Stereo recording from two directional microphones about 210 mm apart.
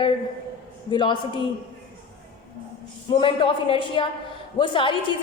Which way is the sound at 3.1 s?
25° left (ahead or behind).